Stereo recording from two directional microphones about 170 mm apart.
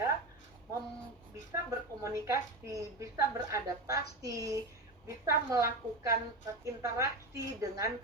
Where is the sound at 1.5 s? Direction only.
15° right (ahead or behind).